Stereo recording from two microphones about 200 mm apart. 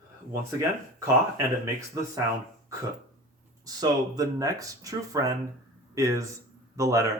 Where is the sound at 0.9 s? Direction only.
15° right (ahead or behind).